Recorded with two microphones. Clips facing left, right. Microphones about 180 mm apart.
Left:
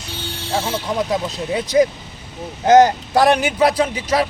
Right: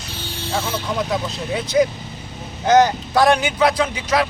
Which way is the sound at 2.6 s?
45° left (ahead or behind).